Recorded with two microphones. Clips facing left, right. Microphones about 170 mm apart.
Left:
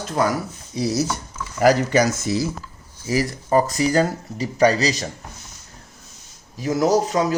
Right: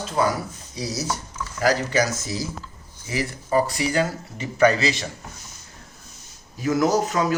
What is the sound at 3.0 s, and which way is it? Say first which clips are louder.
Speech: left 6 dB; 40° left (ahead or behind).